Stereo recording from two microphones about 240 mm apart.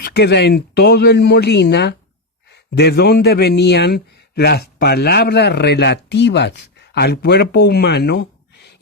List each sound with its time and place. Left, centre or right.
0.0 s a man's voice: left